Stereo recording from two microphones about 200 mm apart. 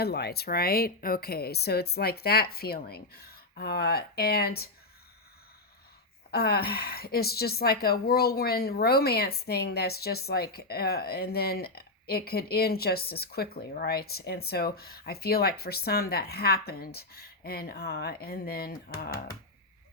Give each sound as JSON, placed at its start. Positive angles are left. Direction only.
{"t": 0.0, "sound": "a woman's voice", "side_deg": 55}
{"t": 6.3, "sound": "a woman's voice", "side_deg": 50}